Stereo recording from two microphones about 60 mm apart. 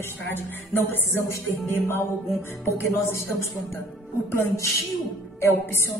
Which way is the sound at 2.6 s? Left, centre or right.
Left.